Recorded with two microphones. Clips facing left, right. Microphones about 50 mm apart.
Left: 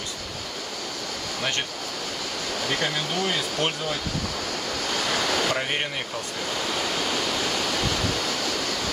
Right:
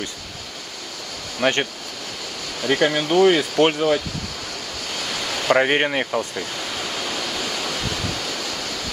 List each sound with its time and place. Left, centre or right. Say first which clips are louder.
1.4 s speech: right 9 dB; right
2.7 s speech: right 10 dB; right
5.5 s speech: right 9 dB; right